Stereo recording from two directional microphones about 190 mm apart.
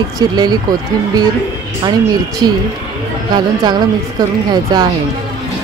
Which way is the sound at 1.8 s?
20° right (ahead or behind).